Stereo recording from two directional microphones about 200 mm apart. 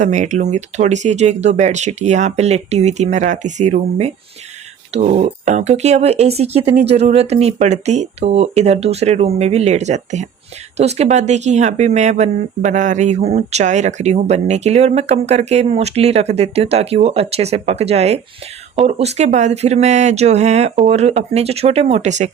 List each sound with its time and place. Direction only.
0.0 s speech: 35° right (ahead or behind)